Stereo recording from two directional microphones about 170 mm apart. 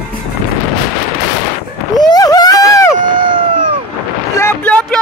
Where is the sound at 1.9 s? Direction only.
25° left (ahead or behind).